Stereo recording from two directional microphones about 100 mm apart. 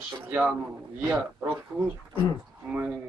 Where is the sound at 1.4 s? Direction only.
20° right (ahead or behind).